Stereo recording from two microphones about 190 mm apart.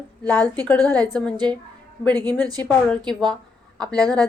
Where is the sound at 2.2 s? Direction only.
20° right (ahead or behind).